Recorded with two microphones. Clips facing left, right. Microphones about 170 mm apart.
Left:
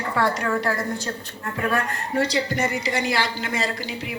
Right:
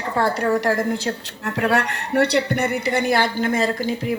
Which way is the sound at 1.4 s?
80° right.